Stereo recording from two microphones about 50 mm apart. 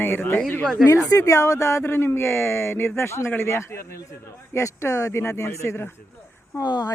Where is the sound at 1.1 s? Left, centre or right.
Left.